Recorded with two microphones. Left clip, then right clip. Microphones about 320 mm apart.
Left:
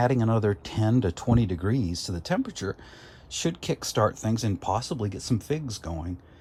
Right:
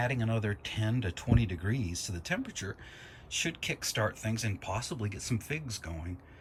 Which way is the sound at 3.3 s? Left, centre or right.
Centre.